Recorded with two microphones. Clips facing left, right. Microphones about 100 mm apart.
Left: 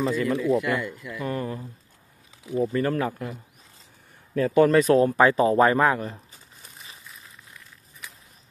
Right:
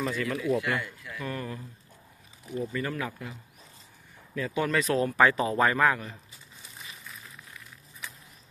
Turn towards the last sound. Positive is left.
turn(degrees=40)  # may be behind; listen again after turning